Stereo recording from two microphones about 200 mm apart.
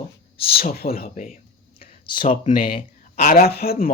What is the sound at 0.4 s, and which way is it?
Speech, 50° left (ahead or behind).